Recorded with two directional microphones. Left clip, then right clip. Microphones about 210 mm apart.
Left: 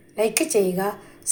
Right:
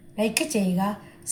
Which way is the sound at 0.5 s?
20° left (ahead or behind).